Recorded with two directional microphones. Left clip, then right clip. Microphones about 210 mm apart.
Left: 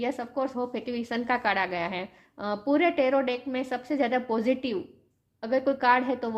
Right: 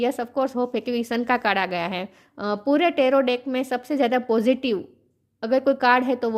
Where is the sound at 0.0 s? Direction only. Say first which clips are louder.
Right 6 dB; 45° right (ahead or behind).